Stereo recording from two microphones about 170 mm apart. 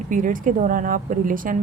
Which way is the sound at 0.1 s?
50° right (ahead or behind).